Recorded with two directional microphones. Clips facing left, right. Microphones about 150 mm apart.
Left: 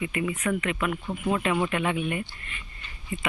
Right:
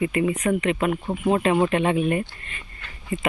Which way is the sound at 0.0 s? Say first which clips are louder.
Right 6 dB; 40° right (ahead or behind).